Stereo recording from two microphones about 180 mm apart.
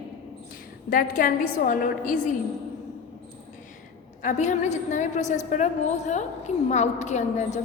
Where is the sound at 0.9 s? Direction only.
50° left (ahead or behind).